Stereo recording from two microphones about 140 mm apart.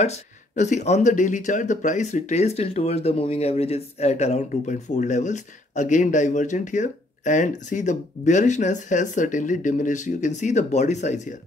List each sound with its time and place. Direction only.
0.0 s speech: 55° left (ahead or behind)